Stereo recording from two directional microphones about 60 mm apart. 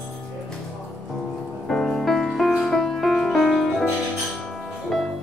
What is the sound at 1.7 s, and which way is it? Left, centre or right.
Music, centre.